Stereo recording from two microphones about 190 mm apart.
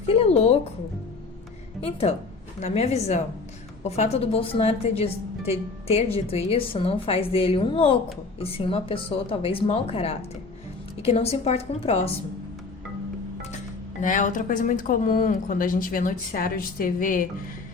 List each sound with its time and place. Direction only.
0.0 s music: 30° left (ahead or behind)
1.8 s a woman's voice: 30° left (ahead or behind)
6.2 s a woman's voice: 30° left (ahead or behind)
14.0 s speech: 45° left (ahead or behind)